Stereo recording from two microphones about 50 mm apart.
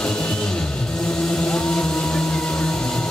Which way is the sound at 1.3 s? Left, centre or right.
Centre.